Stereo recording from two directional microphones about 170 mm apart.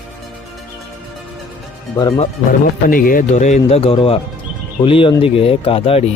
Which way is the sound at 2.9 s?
55° left (ahead or behind).